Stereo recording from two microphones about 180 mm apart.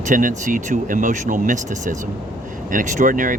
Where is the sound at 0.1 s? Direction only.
45° right (ahead or behind).